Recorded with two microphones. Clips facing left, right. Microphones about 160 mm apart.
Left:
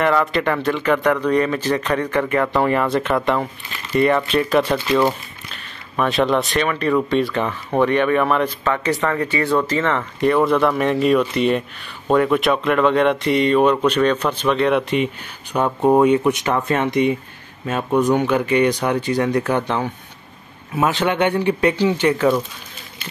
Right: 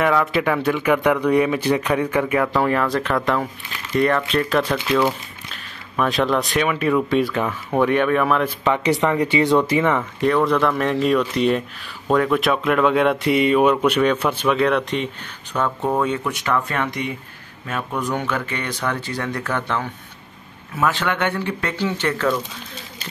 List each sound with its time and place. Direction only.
0.0 s speech: centre (ahead or behind)
8.6 s speech: 15° right (ahead or behind)
10.2 s speech: centre (ahead or behind)
15.5 s speech: 20° left (ahead or behind)